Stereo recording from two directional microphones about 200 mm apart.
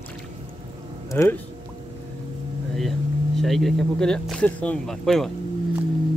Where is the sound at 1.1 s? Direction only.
10° left (ahead or behind).